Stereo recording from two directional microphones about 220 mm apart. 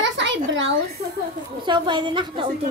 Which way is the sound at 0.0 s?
55° right (ahead or behind).